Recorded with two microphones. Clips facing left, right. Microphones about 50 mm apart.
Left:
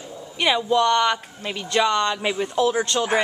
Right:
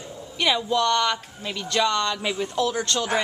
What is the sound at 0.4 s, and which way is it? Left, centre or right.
Speech, centre.